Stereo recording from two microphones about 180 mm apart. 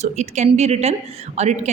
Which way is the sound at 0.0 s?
40° right (ahead or behind).